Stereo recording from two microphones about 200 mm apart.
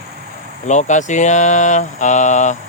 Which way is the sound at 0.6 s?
35° left (ahead or behind).